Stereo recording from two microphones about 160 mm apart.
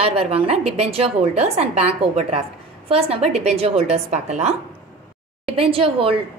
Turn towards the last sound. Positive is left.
turn(degrees=-35)  # may be behind; listen again after turning